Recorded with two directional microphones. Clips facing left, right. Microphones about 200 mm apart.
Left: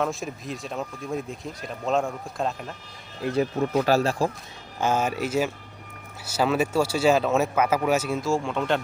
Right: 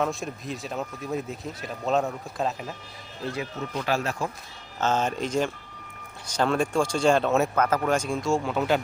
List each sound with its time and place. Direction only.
0.0 s speech: centre (ahead or behind)
3.3 s speech: 50° left (ahead or behind); by 4.3 s 30° left (ahead or behind)
4.8 s speech: 10° left (ahead or behind)